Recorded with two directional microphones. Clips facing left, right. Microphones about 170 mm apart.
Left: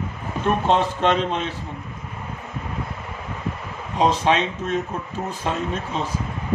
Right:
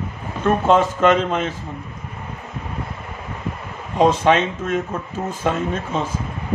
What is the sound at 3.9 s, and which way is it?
Speech, 50° right (ahead or behind).